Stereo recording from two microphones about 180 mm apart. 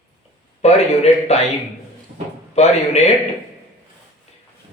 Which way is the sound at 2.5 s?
35° left (ahead or behind).